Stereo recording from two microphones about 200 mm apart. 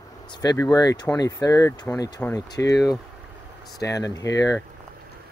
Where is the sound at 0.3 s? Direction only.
20° left (ahead or behind).